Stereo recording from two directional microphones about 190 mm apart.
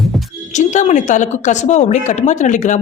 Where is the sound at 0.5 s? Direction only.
40° left (ahead or behind).